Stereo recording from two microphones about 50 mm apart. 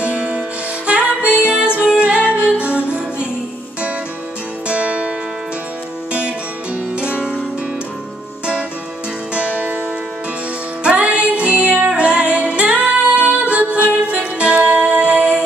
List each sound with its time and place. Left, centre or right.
0.0 s music: centre
4.6 s music: right
7.0 s music: right
9.3 s music: right
10.8 s music: right